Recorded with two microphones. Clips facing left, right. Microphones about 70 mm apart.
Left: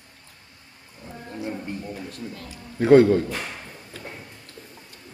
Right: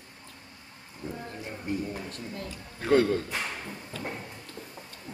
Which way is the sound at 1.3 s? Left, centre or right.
Centre.